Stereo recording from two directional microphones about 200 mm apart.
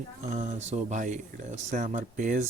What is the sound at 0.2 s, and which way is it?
Speech, 35° right (ahead or behind).